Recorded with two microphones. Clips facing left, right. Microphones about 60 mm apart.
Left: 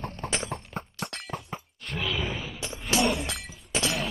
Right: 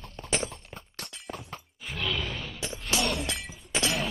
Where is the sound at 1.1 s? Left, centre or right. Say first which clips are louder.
Left 4 dB; left.